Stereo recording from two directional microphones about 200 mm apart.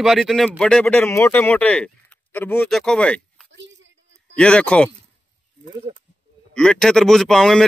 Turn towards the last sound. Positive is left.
turn(degrees=0)  # may be behind; listen again after turning